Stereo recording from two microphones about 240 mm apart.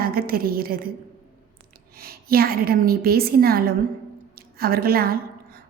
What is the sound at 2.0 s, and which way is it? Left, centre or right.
A woman's voice, right.